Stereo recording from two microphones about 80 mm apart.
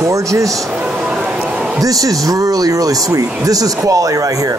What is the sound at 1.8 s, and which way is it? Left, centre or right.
A woman's voice, right.